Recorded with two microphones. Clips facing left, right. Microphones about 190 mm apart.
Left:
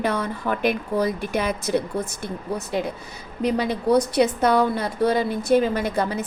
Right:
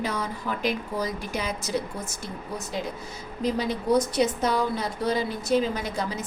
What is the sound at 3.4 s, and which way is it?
A woman's voice, 60° left (ahead or behind).